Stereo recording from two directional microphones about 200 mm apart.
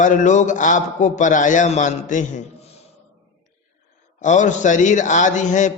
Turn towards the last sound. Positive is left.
turn(degrees=40)  # may be behind; listen again after turning